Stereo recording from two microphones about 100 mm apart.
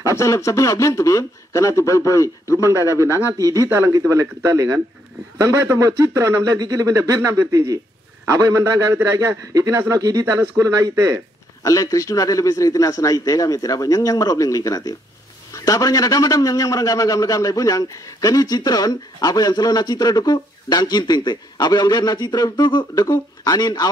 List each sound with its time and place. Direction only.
0.2 s a man's voice: 30° left (ahead or behind)
2.7 s speech: 30° right (ahead or behind)
11.6 s a man's voice: 35° left (ahead or behind)